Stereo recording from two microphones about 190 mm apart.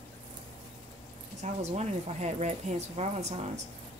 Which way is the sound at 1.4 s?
35° right (ahead or behind).